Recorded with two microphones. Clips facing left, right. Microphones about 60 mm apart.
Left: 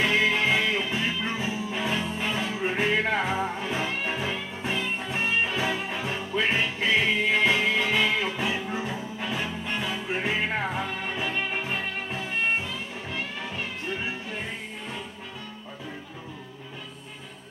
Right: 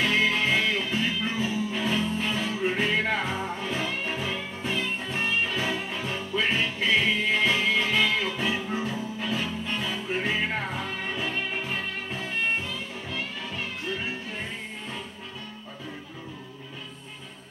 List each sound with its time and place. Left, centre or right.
0.3 s music: left
9.2 s music: left